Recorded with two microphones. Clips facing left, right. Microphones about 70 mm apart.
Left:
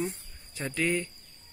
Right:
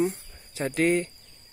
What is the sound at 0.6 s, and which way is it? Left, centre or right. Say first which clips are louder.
Speech: right 6 dB; right.